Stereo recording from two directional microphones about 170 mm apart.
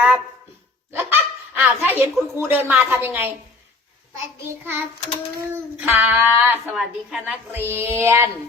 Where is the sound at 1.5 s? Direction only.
10° right (ahead or behind).